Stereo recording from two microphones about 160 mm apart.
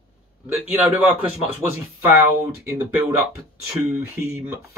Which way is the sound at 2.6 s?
15° right (ahead or behind).